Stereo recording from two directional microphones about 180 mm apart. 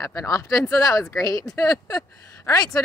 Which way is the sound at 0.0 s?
20° left (ahead or behind).